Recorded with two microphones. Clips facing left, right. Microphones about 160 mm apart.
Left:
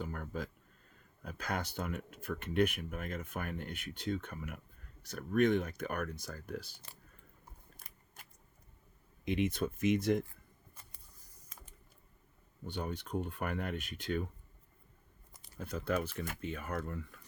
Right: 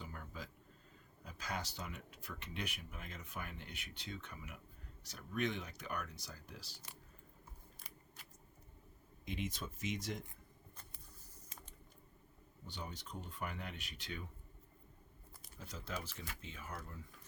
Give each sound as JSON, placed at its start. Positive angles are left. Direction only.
{"t": 0.0, "sound": "a sound", "side_deg": 50}
{"t": 1.2, "sound": "speech", "side_deg": 55}
{"t": 7.8, "sound": "scissors", "side_deg": 50}
{"t": 9.2, "sound": "speech", "side_deg": 60}
{"t": 12.6, "sound": "speech", "side_deg": 55}
{"t": 15.5, "sound": "speech", "side_deg": 55}